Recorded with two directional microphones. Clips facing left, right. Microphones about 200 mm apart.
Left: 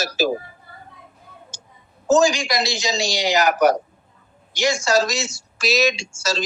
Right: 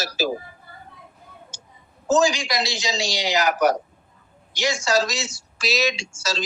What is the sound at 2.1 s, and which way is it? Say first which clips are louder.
Speech: left 3 dB; 45° left (ahead or behind).